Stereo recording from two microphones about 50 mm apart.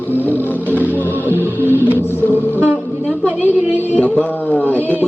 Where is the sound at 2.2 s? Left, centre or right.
Left.